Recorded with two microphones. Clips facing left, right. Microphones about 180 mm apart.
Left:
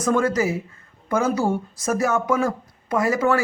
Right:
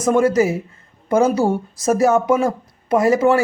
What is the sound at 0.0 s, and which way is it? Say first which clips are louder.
Speech: right 5 dB; 25° right (ahead or behind).